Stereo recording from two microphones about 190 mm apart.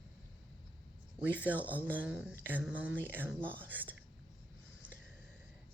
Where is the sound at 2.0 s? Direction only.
5° right (ahead or behind).